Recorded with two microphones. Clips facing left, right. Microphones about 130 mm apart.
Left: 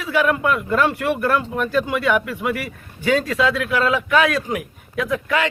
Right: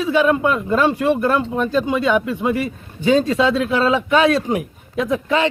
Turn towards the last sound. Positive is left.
turn(degrees=-25)  # may be behind; listen again after turning